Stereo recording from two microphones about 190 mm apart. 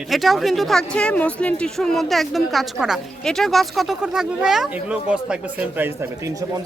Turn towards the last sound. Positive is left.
turn(degrees=-10)  # may be behind; listen again after turning